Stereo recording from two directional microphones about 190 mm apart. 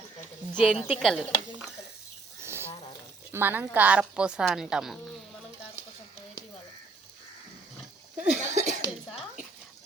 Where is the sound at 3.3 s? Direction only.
10° right (ahead or behind).